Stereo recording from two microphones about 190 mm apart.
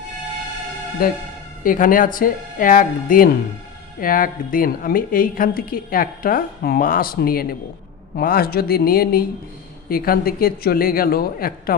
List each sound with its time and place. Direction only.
1.0 s a woman's voice: 50° left (ahead or behind)